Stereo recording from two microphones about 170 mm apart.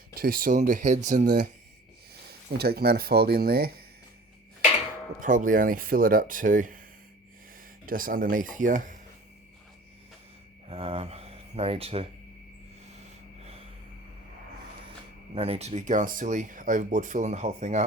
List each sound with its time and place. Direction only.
0.2 s speech: 60° right (ahead or behind)
2.6 s speech: 65° right (ahead or behind)
5.2 s speech: 50° right (ahead or behind)
7.9 s speech: 55° right (ahead or behind)
10.7 s speech: 35° right (ahead or behind)
15.4 s speech: 35° right (ahead or behind)